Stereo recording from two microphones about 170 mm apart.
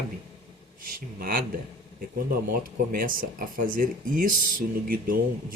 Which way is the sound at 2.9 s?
55° right (ahead or behind).